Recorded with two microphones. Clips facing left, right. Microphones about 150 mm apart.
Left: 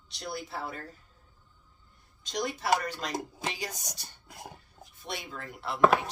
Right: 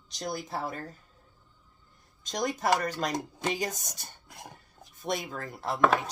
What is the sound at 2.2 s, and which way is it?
Speech, 45° right (ahead or behind).